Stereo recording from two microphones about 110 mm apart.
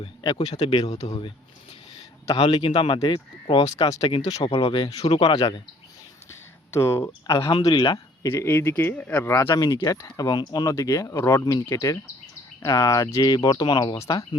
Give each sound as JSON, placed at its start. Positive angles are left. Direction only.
{"t": 0.0, "sound": "speech", "side_deg": 40}
{"t": 2.6, "sound": "speech", "side_deg": 55}
{"t": 3.5, "sound": "speech", "side_deg": 40}
{"t": 6.7, "sound": "speech", "side_deg": 25}
{"t": 7.3, "sound": "speech", "side_deg": 45}
{"t": 7.9, "sound": "speech", "side_deg": 30}
{"t": 9.6, "sound": "speech", "side_deg": 35}
{"t": 14.0, "sound": "speech", "side_deg": 30}